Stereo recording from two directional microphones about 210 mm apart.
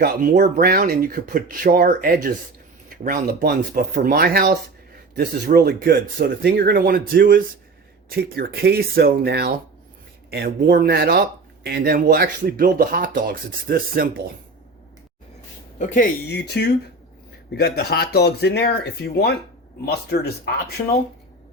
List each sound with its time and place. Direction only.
0.0 s speech: 50° right (ahead or behind)
15.8 s speech: 35° left (ahead or behind)
16.3 s speech: 55° left (ahead or behind)